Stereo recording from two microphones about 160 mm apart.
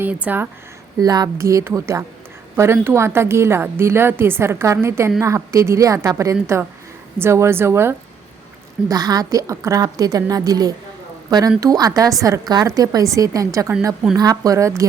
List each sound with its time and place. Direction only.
0.0 s a woman's voice: 10° right (ahead or behind)
0.9 s a woman's voice: 25° right (ahead or behind)